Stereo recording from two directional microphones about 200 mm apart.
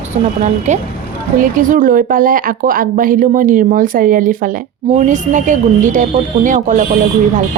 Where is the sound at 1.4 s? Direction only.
45° right (ahead or behind).